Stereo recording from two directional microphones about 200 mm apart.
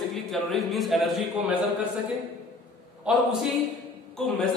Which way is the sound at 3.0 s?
5° right (ahead or behind).